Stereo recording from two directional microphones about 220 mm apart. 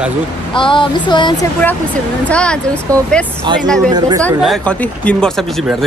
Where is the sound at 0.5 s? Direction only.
20° left (ahead or behind).